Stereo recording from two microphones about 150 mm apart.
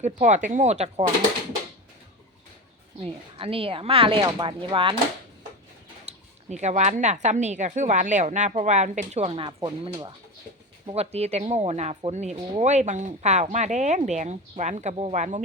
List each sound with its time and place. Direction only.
0.0 s speech: 55° right (ahead or behind)
3.0 s speech: 40° right (ahead or behind)
6.1 s speech: 50° right (ahead or behind)
10.8 s speech: 45° right (ahead or behind)